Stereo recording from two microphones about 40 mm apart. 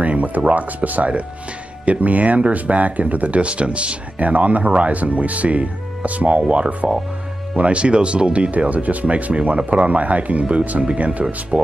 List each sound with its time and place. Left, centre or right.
0.0 s music: right
0.5 s speech: right
11.5 s speech: centre